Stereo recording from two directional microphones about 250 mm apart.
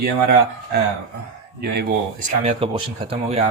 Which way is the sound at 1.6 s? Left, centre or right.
Right.